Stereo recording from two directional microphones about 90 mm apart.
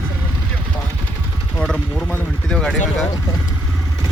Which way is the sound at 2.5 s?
10° left (ahead or behind).